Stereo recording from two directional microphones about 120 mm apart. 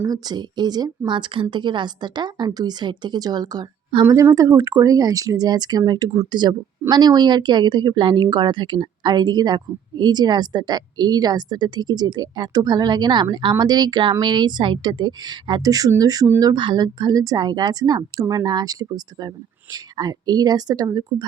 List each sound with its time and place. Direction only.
0.1 s speech: 35° right (ahead or behind)